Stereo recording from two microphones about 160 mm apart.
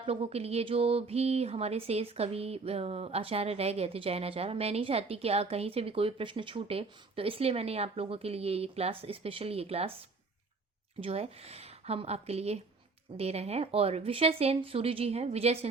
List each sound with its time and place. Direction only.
0.0 s speech: 35° right (ahead or behind)
11.0 s speech: 40° right (ahead or behind)